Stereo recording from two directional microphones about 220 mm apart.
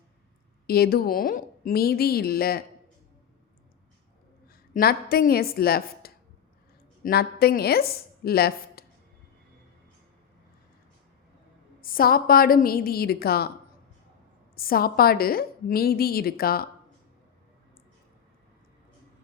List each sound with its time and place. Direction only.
0.7 s a woman's voice: 45° left (ahead or behind)
4.4 s a woman's voice: 45° left (ahead or behind)
11.8 s a woman's voice: 40° left (ahead or behind)
14.5 s a woman's voice: 40° left (ahead or behind)